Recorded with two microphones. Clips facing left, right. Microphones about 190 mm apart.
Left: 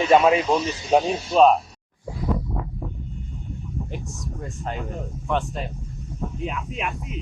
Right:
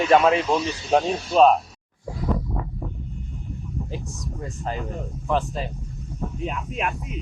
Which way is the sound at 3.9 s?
Centre (ahead or behind).